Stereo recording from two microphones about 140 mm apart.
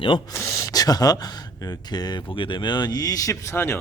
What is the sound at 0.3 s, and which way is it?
Speech, 20° left (ahead or behind).